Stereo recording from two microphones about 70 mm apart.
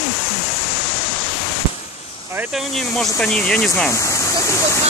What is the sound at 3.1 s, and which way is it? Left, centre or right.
Speech, centre.